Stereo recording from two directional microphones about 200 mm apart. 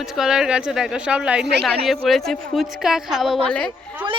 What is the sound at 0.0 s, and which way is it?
A woman's voice, centre (ahead or behind).